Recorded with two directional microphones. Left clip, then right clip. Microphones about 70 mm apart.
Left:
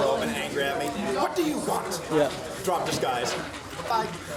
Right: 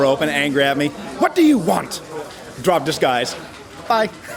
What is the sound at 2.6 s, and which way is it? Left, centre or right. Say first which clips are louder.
Speech: right 10 dB; right.